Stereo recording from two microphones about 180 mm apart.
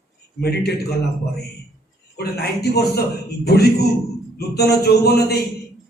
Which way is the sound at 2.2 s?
60° left (ahead or behind).